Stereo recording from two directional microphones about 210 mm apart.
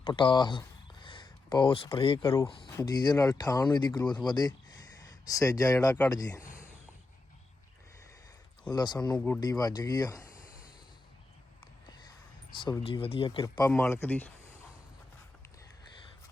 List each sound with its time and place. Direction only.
0.0 s speech: 25° left (ahead or behind)
8.7 s speech: 20° left (ahead or behind)
9.1 s speech: 10° left (ahead or behind)
12.5 s speech: 20° left (ahead or behind)